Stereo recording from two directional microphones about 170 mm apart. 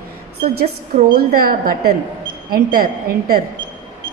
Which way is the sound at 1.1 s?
60° right (ahead or behind).